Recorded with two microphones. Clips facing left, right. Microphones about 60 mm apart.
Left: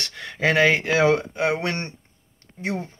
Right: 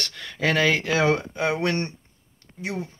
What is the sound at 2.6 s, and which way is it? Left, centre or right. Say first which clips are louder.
Speech: left 2 dB; left.